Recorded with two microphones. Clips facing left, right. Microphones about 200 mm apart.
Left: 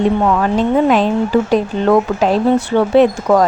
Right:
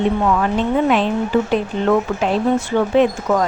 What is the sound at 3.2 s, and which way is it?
Speech, 65° left (ahead or behind).